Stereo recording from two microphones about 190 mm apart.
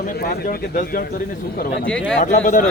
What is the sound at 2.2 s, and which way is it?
Speech, 40° left (ahead or behind).